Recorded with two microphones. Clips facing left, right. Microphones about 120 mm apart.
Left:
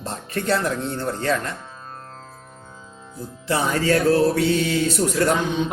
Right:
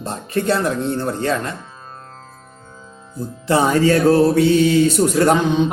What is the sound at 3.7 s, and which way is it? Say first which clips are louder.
Speech: right 3 dB; 25° right (ahead or behind).